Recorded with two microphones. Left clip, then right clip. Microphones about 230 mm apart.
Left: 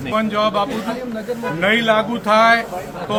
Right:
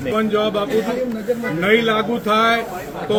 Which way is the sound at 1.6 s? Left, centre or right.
Centre.